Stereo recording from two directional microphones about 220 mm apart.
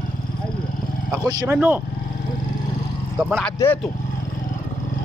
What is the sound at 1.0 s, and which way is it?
Speech, 10° right (ahead or behind).